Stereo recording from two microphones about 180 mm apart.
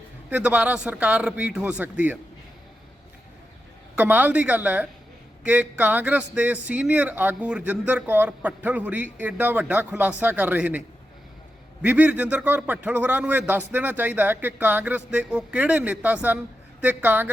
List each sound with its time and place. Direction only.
0.3 s a man's voice: 5° right (ahead or behind)
3.9 s a man's voice: 10° right (ahead or behind)